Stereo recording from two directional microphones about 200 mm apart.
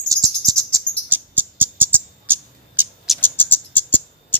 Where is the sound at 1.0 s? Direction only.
10° right (ahead or behind).